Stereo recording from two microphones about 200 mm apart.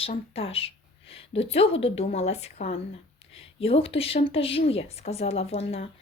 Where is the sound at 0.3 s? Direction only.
30° left (ahead or behind).